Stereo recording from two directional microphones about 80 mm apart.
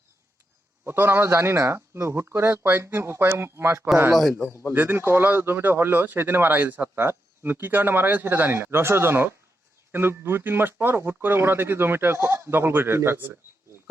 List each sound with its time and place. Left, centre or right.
0.9 s speech: right
4.1 s speech: centre
4.7 s speech: right